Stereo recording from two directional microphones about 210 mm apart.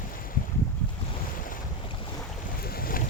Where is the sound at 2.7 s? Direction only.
45° left (ahead or behind).